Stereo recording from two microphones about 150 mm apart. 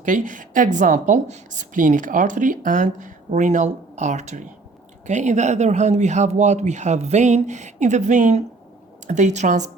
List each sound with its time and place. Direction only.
0.0 s speech: 60° right (ahead or behind)